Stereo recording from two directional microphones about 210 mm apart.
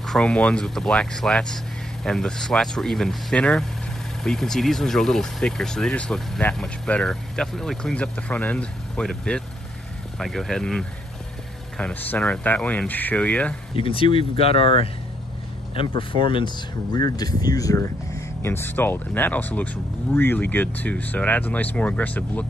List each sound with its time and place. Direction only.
0.0 s speech: 5° left (ahead or behind)
13.7 s speech: 25° left (ahead or behind)
16.0 s speech: 25° left (ahead or behind); by 22.5 s 5° left (ahead or behind)